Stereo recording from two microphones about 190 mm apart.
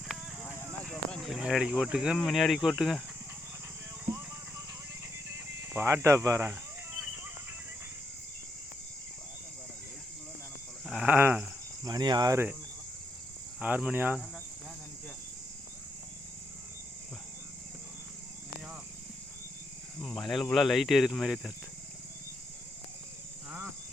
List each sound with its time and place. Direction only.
0.9 s speech: centre (ahead or behind)
4.0 s music: 15° right (ahead or behind)
5.6 s speech: 15° right (ahead or behind)
10.8 s sheep: 5° right (ahead or behind)
11.9 s speech: 20° right (ahead or behind)
13.6 s speech: 5° right (ahead or behind)
20.0 s speech: 5° left (ahead or behind)